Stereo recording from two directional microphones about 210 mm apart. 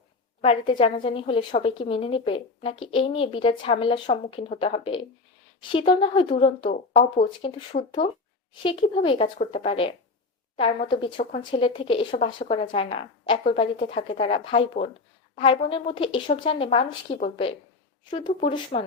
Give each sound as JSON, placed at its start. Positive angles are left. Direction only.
{"t": 0.4, "sound": "a woman's voice", "side_deg": 25}
{"t": 18.0, "sound": "a woman's voice", "side_deg": 25}